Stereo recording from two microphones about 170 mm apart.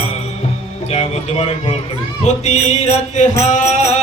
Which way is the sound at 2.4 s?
40° left (ahead or behind).